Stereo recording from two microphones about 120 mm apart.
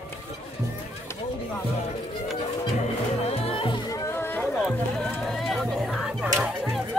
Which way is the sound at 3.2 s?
55° left (ahead or behind).